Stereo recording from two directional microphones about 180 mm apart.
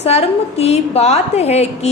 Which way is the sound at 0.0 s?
35° left (ahead or behind).